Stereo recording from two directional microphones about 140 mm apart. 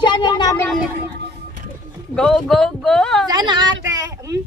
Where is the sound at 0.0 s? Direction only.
30° left (ahead or behind).